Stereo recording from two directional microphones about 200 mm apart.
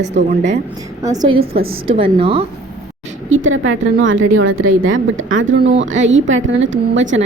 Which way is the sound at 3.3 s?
75° right (ahead or behind).